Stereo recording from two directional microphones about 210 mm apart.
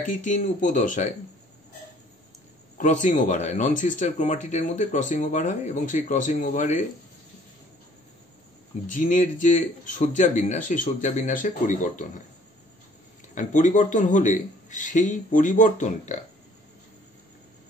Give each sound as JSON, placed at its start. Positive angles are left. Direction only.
{"t": 0.0, "sound": "speech", "side_deg": 35}
{"t": 2.8, "sound": "speech", "side_deg": 35}
{"t": 8.8, "sound": "speech", "side_deg": 40}
{"t": 13.3, "sound": "speech", "side_deg": 35}